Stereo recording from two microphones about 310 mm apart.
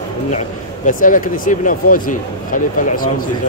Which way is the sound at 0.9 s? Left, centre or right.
Left.